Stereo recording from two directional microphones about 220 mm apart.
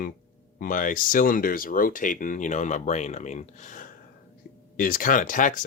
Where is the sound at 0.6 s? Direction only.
40° left (ahead or behind).